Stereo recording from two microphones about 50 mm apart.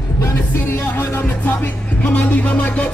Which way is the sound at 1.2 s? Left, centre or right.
Left.